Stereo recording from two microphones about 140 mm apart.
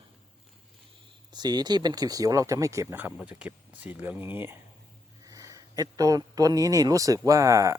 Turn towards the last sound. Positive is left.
turn(degrees=-25)  # may be behind; listen again after turning